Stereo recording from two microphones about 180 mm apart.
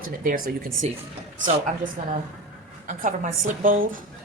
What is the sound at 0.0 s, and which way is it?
Speech, 50° right (ahead or behind).